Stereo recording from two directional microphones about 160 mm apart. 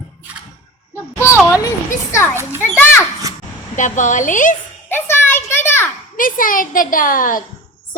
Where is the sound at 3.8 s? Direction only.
50° left (ahead or behind).